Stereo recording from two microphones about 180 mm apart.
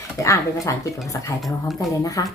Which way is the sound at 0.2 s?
15° left (ahead or behind).